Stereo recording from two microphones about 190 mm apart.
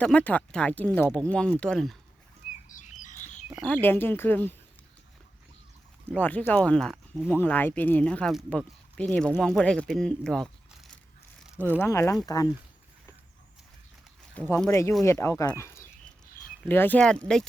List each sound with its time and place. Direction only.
0.0 s speech: 5° left (ahead or behind)
2.6 s bird: 40° left (ahead or behind)
3.7 s speech: 10° left (ahead or behind)
6.1 s speech: 10° left (ahead or behind)
11.5 s speech: 10° right (ahead or behind)
11.8 s speech: 15° left (ahead or behind)
14.3 s speech: 5° left (ahead or behind)